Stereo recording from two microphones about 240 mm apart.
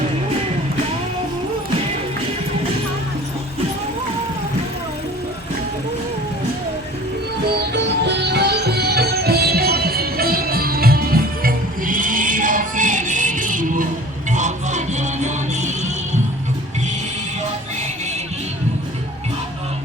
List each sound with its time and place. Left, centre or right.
7.7 s music: right